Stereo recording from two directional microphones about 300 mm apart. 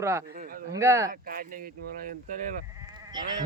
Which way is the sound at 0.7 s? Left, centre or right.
Centre.